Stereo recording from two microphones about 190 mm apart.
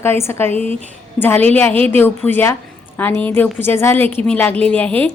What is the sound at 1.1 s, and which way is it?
A woman's voice, 10° left (ahead or behind).